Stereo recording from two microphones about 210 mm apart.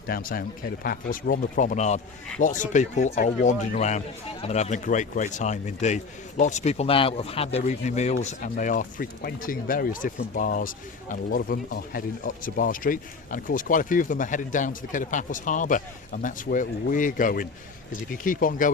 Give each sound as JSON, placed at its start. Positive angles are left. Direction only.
{"t": 0.1, "sound": "speech", "side_deg": 45}